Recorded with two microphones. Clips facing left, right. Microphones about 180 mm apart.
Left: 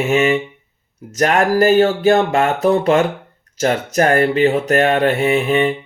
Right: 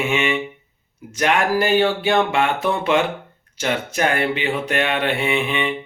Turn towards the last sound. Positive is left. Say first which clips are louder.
# left 6 dB
turn(degrees=40)  # may be behind; listen again after turning